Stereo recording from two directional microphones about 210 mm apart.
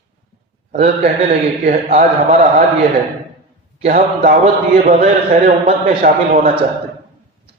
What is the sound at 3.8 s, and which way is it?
A man's voice, 35° right (ahead or behind).